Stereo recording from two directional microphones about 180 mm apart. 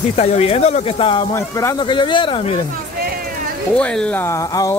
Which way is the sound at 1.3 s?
15° left (ahead or behind).